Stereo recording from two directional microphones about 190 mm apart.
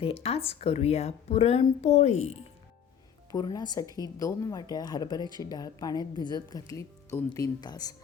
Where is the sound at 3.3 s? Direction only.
20° left (ahead or behind).